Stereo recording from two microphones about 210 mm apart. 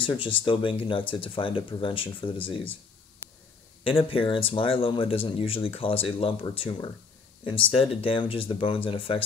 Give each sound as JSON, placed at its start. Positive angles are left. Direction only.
{"t": 0.0, "sound": "speech", "side_deg": 25}
{"t": 3.8, "sound": "speech", "side_deg": 25}